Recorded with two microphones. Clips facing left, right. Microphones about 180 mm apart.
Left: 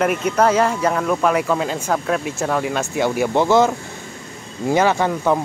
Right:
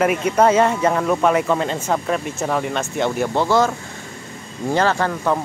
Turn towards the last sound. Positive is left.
turn(degrees=10)  # may be behind; listen again after turning